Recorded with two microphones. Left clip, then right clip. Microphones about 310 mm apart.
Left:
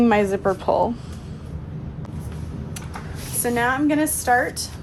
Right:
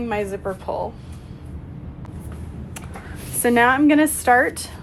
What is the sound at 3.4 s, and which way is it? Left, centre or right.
A woman's voice, centre.